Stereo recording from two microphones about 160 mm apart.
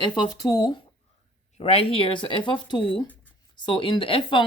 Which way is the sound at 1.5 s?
40° left (ahead or behind).